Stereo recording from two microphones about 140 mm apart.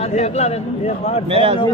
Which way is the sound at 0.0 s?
50° left (ahead or behind).